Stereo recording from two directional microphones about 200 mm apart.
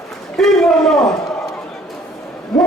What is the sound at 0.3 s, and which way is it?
Speech, centre (ahead or behind).